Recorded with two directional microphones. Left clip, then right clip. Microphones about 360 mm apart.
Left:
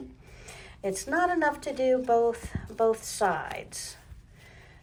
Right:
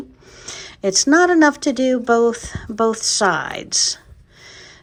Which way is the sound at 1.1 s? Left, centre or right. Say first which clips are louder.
Right 11 dB; right.